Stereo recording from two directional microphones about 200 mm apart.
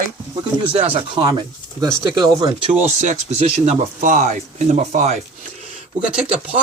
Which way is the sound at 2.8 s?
35° right (ahead or behind).